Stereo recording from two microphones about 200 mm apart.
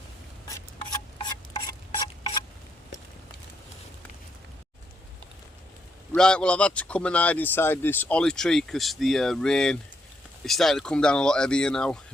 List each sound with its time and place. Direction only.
1.2 s rub: 25° left (ahead or behind)
6.1 s speech: 5° left (ahead or behind)